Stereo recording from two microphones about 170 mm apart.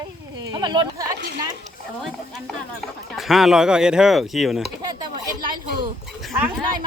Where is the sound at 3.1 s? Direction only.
Centre (ahead or behind).